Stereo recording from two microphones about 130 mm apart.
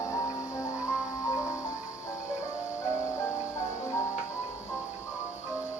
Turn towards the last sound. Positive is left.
turn(degrees=20)  # may be behind; listen again after turning